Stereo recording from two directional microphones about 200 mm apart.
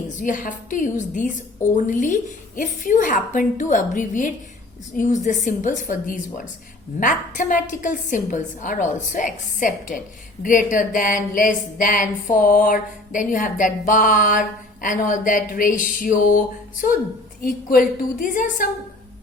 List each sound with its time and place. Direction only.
0.2 s a woman's voice: 40° left (ahead or behind)